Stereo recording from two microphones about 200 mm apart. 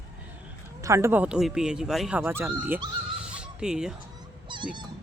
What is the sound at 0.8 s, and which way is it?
Speech, 15° right (ahead or behind).